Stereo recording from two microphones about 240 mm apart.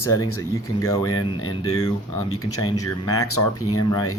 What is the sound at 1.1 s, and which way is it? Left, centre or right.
Speech, left.